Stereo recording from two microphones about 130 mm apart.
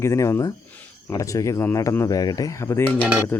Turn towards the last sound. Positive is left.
turn(degrees=20)  # may be behind; listen again after turning